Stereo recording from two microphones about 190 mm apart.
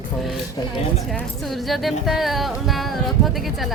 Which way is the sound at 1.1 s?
Centre (ahead or behind).